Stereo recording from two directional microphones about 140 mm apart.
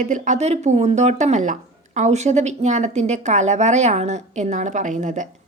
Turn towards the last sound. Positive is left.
turn(degrees=-60)  # may be behind; listen again after turning